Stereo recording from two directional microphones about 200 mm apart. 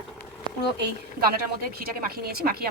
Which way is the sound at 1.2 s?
50° right (ahead or behind).